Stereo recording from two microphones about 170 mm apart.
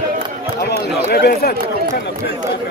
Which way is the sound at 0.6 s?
70° left (ahead or behind).